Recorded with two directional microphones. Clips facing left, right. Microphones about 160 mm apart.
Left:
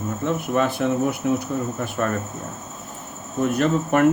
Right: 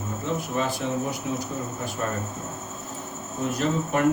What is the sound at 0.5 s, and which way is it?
Speech, 60° left (ahead or behind).